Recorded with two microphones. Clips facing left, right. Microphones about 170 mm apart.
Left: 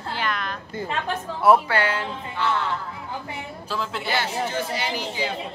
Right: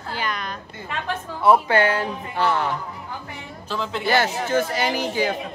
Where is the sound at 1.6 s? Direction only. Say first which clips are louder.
Right 5 dB; 25° right (ahead or behind).